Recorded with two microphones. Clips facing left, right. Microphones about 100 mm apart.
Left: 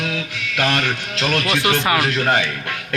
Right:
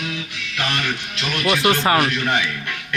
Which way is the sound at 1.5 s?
30° right (ahead or behind).